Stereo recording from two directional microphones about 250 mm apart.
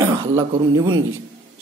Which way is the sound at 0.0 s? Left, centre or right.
Centre.